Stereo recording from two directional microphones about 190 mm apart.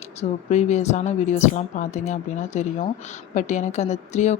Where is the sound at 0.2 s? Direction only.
35° left (ahead or behind).